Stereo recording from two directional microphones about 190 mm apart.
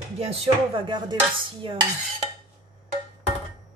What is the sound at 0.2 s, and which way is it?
Speech, 30° right (ahead or behind).